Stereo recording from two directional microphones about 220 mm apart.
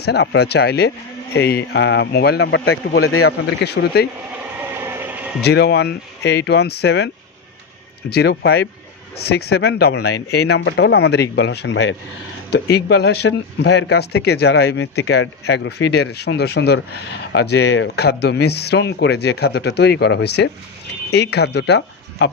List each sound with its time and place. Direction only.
0.0 s speech: 50° left (ahead or behind)
3.0 s speech: 75° left (ahead or behind)
3.6 s speech: 50° left (ahead or behind)
4.7 s a sound: 5° right (ahead or behind)
5.4 s speech: 50° left (ahead or behind)
8.1 s speech: 50° left (ahead or behind)